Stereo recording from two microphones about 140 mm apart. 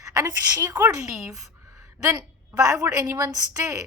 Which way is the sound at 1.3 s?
25° right (ahead or behind).